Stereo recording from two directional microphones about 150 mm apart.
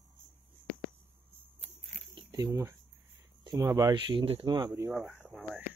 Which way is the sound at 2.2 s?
30° right (ahead or behind).